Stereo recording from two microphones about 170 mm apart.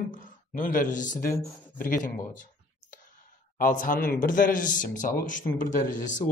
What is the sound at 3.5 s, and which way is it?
Speech, 55° left (ahead or behind).